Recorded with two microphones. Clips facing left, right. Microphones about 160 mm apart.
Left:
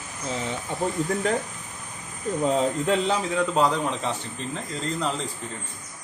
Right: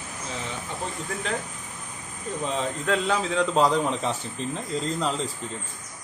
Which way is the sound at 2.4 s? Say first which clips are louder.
Left 5 dB; 40° left (ahead or behind).